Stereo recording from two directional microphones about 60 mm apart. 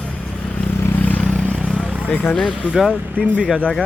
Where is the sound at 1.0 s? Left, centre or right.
Left.